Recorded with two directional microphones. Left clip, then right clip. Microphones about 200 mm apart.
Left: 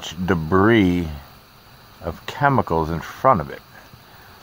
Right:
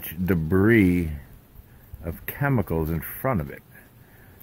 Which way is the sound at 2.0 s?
Centre (ahead or behind).